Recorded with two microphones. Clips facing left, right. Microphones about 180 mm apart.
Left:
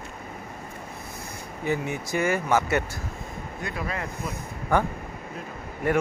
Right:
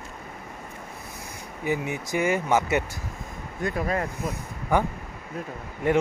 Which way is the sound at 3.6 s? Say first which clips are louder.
Right 6 dB; 45° right (ahead or behind).